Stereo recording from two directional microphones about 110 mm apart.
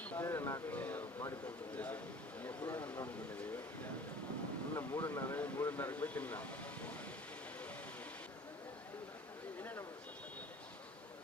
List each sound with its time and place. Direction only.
0.0 s speech: 20° left (ahead or behind)
4.8 s speech: 20° left (ahead or behind)
9.6 s a sound: 20° left (ahead or behind)